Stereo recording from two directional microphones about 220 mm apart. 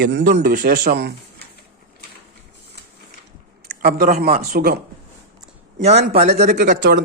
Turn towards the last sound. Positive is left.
turn(degrees=-35)  # may be behind; listen again after turning